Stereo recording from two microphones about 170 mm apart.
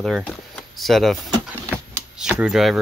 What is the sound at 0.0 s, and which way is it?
Speech, centre (ahead or behind).